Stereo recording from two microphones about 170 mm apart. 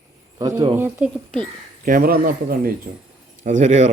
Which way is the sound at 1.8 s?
55° right (ahead or behind).